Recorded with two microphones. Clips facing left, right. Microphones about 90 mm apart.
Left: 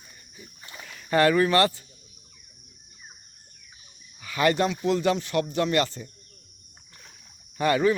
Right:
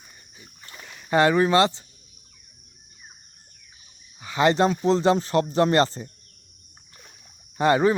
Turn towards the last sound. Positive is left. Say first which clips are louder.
# right 3 dB
turn(degrees=-30)  # may be behind; listen again after turning